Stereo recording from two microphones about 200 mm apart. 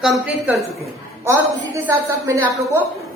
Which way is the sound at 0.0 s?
Centre (ahead or behind).